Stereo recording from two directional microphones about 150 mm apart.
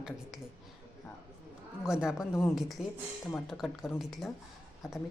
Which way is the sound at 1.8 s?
5° right (ahead or behind).